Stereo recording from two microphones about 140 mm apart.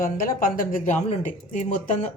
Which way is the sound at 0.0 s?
80° left.